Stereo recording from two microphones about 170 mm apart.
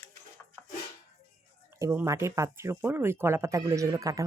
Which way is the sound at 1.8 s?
15° right (ahead or behind).